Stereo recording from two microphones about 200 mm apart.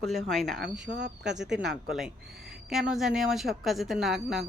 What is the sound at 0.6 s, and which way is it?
Speech, 60° right (ahead or behind).